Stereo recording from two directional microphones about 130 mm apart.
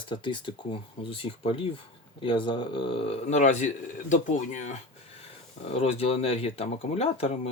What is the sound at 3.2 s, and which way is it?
Speech, 65° left (ahead or behind).